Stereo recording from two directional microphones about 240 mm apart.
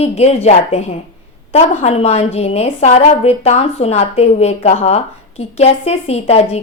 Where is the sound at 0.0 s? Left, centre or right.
Left.